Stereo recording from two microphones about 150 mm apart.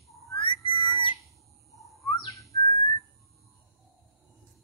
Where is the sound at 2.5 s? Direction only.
25° left (ahead or behind).